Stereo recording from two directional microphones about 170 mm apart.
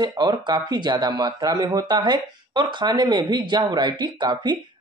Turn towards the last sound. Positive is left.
turn(degrees=-25)  # may be behind; listen again after turning